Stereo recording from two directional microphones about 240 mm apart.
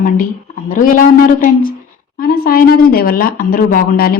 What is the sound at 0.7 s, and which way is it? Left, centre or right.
Speech, left.